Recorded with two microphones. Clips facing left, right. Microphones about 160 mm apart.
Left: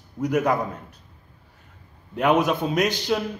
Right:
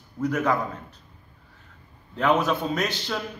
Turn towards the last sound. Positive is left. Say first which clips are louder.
# left 5 dB
turn(degrees=15)  # may be behind; listen again after turning